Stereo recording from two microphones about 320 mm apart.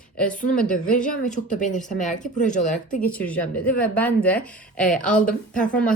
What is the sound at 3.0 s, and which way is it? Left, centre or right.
A woman's voice, centre.